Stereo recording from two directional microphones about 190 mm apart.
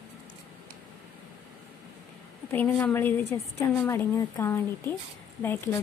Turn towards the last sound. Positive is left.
turn(degrees=10)  # may be behind; listen again after turning